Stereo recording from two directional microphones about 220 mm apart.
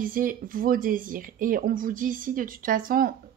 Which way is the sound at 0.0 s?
40° right (ahead or behind).